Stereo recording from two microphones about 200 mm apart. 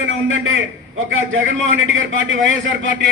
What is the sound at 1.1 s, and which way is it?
A man's voice, 75° right (ahead or behind).